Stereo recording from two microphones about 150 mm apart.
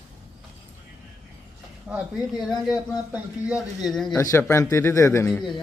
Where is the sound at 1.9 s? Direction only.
Centre (ahead or behind).